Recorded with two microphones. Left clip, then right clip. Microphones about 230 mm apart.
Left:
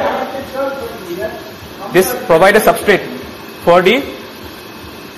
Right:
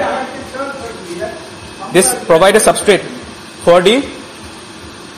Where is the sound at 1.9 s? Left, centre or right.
Centre.